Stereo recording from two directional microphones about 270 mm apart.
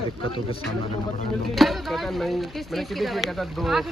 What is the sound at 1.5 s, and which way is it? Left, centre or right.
Speech, centre.